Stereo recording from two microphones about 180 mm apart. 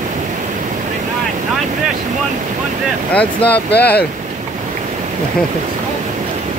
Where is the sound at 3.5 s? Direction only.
65° left (ahead or behind).